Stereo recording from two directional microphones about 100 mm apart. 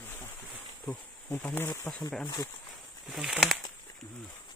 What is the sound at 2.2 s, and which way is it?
Speech, 40° left (ahead or behind).